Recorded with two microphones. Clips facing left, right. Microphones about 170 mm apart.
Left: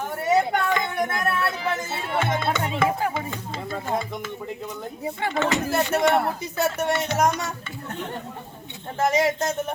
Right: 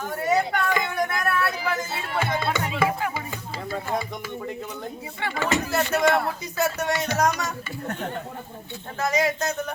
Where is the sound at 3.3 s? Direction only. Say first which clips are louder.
Left 1 dB; 5° right (ahead or behind).